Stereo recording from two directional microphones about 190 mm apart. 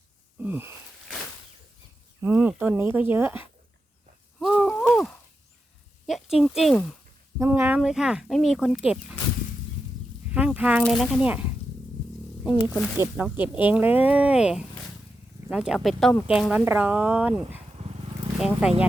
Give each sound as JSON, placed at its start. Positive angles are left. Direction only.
{"t": 0.3, "sound": "wheeze", "side_deg": -10}
{"t": 2.2, "sound": "speech", "side_deg": -5}
{"t": 4.4, "sound": "a sound", "side_deg": 0}
{"t": 6.1, "sound": "speech", "side_deg": 0}
{"t": 7.3, "sound": "speech", "side_deg": -10}
{"t": 10.3, "sound": "speech", "side_deg": -5}
{"t": 13.0, "sound": "speech", "side_deg": -10}
{"t": 17.7, "sound": "dog", "side_deg": -30}
{"t": 18.3, "sound": "speech", "side_deg": -5}